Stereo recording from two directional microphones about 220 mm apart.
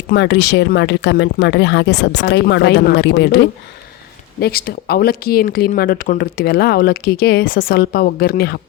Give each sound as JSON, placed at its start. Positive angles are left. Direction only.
{"t": 0.1, "sound": "speech", "side_deg": 50}